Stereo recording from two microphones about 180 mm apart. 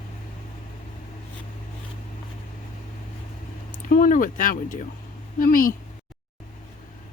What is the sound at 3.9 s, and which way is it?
Speech, 50° left (ahead or behind).